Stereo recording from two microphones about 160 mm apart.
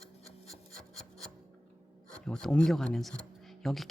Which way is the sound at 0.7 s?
5° left (ahead or behind).